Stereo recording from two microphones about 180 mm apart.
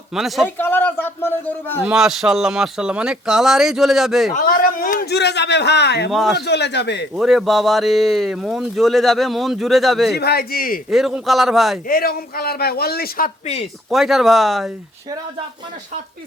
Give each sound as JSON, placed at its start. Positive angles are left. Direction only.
{"t": 0.1, "sound": "speech", "side_deg": 0}
{"t": 0.4, "sound": "speech", "side_deg": 10}
{"t": 1.8, "sound": "speech", "side_deg": -5}
{"t": 4.4, "sound": "a man's voice", "side_deg": 50}
{"t": 6.1, "sound": "speech", "side_deg": 0}
{"t": 6.3, "sound": "a man's voice", "side_deg": 70}
{"t": 7.2, "sound": "speech", "side_deg": 0}
{"t": 10.2, "sound": "a man's voice", "side_deg": 60}
{"t": 10.8, "sound": "speech", "side_deg": -5}
{"t": 11.9, "sound": "a man's voice", "side_deg": 55}
{"t": 13.4, "sound": "speech", "side_deg": 35}
{"t": 13.9, "sound": "speech", "side_deg": 0}